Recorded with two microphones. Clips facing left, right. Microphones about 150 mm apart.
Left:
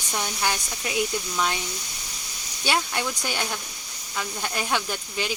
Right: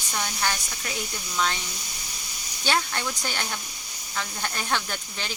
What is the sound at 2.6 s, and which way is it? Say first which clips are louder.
Speech: left 1 dB; 10° left (ahead or behind).